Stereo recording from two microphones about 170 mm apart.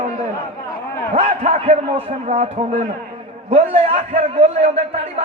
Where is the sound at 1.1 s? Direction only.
40° right (ahead or behind).